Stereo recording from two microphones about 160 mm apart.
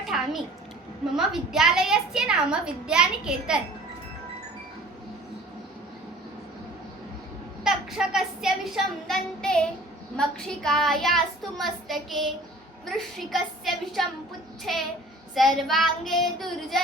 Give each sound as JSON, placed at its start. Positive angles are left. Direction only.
{"t": 0.1, "sound": "a sound", "side_deg": 0}
{"t": 1.1, "sound": "a woman's voice", "side_deg": -5}
{"t": 7.6, "sound": "a woman's voice", "side_deg": 0}